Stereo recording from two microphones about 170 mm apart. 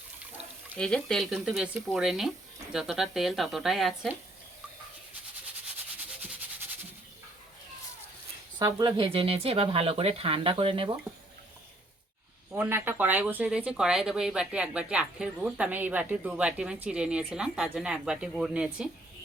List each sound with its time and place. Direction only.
0.8 s speech: 5° left (ahead or behind)
8.5 s speech: 25° right (ahead or behind)
12.5 s speech: 10° right (ahead or behind)